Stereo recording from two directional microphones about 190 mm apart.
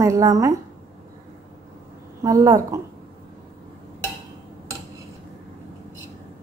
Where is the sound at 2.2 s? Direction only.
20° right (ahead or behind).